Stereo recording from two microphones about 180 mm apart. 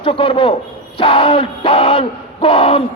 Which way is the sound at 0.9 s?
30° left (ahead or behind).